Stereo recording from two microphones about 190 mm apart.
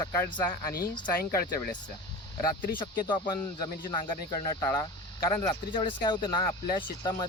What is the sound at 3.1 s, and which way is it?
Speech, 20° left (ahead or behind).